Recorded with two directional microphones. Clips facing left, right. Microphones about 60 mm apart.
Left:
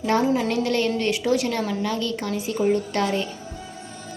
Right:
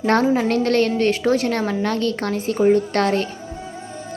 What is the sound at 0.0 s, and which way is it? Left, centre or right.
A woman's voice, right.